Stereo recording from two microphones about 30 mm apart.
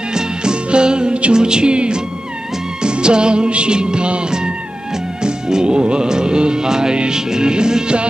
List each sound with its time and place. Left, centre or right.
0.1 s music: right